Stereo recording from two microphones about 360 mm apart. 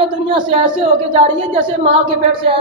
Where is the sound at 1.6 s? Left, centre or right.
Centre.